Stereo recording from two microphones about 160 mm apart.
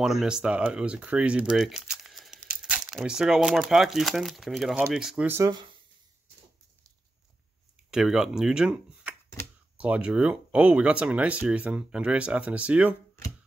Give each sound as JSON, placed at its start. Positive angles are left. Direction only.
{"t": 0.0, "sound": "speech", "side_deg": 0}
{"t": 5.5, "sound": "speech", "side_deg": -30}
{"t": 7.9, "sound": "speech", "side_deg": -5}